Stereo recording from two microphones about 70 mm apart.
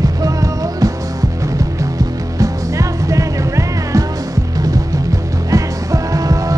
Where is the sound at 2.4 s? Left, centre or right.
Right.